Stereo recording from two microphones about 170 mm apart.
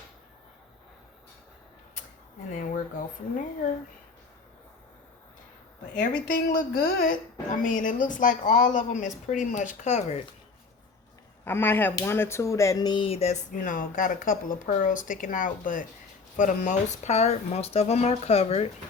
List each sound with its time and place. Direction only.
2.5 s speech: 50° left (ahead or behind)
6.7 s speech: 50° left (ahead or behind)
11.4 s speech: 10° left (ahead or behind); by 18.7 s 35° left (ahead or behind)